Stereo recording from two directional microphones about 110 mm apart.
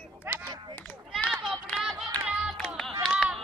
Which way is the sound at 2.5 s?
5° left (ahead or behind).